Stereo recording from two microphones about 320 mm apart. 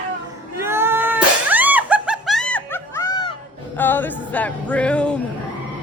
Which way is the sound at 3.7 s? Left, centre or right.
Centre.